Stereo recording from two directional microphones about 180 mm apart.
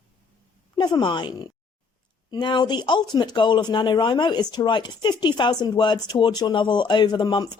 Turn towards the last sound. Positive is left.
turn(degrees=25)  # may be behind; listen again after turning